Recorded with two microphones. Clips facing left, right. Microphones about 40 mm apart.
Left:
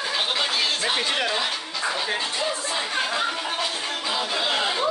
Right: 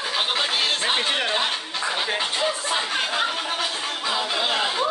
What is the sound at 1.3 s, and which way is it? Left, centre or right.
Music, right.